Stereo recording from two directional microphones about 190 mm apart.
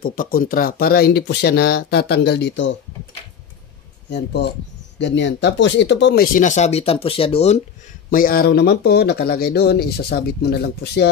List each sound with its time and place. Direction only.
0.0 s speech: 50° left (ahead or behind); by 2.8 s 70° left (ahead or behind)
4.1 s speech: 65° left (ahead or behind)
6.3 s speech: 40° left (ahead or behind)
8.1 s speech: 50° left (ahead or behind)